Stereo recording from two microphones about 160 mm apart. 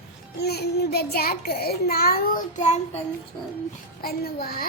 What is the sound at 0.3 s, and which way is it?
A child's voice, 90° left.